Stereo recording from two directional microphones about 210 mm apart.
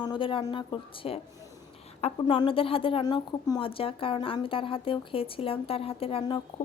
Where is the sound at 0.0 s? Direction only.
25° left (ahead or behind).